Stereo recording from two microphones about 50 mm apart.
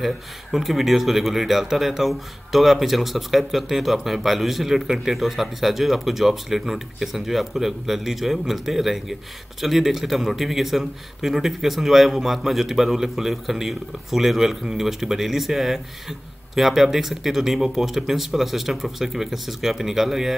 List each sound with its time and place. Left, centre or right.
0.0 s speech: centre